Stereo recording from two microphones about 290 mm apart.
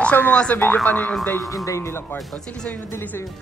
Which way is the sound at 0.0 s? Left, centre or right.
Centre.